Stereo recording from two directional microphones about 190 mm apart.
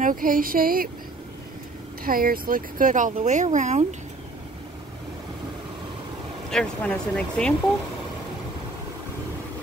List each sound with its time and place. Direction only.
0.0 s speech: 45° right (ahead or behind)
2.0 s speech: 50° right (ahead or behind)
6.5 s speech: 5° left (ahead or behind)